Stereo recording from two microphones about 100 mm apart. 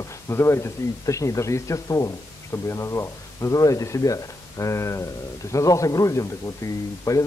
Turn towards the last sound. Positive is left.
turn(degrees=30)  # may be behind; listen again after turning